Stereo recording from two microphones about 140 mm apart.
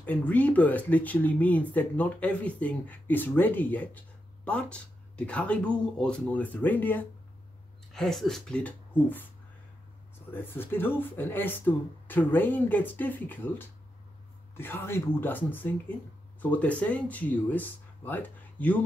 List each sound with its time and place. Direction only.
0.0 s speech: 10° left (ahead or behind)
7.9 s speech: 5° left (ahead or behind)
10.3 s speech: 15° left (ahead or behind)